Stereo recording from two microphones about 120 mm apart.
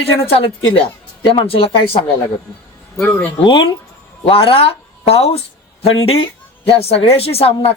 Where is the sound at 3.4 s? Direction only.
45° left (ahead or behind).